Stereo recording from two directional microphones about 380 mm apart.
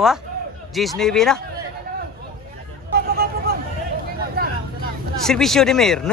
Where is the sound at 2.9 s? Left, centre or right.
Right.